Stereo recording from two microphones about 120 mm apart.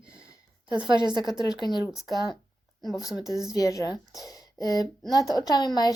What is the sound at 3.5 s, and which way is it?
A woman's voice, 30° left (ahead or behind).